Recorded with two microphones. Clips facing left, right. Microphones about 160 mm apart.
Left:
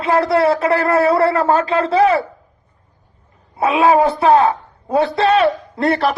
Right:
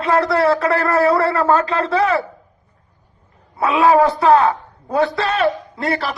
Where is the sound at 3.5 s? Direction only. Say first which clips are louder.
Even; 25° left (ahead or behind).